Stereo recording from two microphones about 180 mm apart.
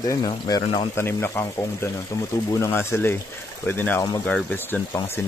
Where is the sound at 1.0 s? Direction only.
15° left (ahead or behind).